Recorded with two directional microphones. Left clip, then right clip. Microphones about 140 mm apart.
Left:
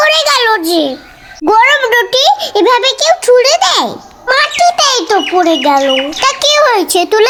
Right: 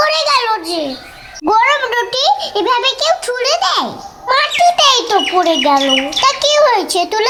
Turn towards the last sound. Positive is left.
turn(degrees=30)  # may be behind; listen again after turning